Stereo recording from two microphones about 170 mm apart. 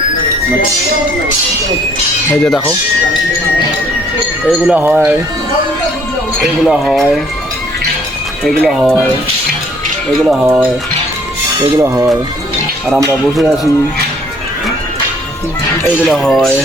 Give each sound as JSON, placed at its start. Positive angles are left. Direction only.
{"t": 2.3, "sound": "speech", "side_deg": 5}
{"t": 4.4, "sound": "speech", "side_deg": -5}
{"t": 6.4, "sound": "speech", "side_deg": 0}
{"t": 8.4, "sound": "speech", "side_deg": 0}
{"t": 10.2, "sound": "speech", "side_deg": -5}
{"t": 11.8, "sound": "speech", "side_deg": -20}
{"t": 16.0, "sound": "speech", "side_deg": 0}